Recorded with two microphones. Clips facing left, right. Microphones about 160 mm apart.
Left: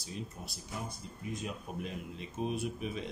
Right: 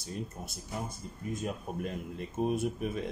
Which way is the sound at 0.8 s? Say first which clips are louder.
Right 3 dB; 50° right (ahead or behind).